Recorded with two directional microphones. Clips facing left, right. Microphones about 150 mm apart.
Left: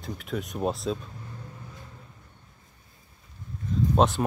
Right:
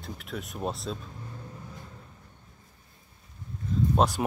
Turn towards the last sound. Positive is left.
turn(degrees=-5)  # may be behind; listen again after turning